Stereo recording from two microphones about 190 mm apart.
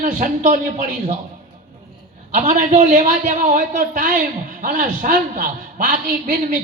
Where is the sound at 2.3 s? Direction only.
40° right (ahead or behind).